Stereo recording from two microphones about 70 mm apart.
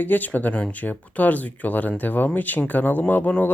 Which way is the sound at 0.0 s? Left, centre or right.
Left.